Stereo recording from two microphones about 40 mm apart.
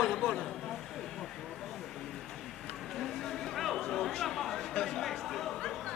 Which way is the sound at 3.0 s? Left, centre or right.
Centre.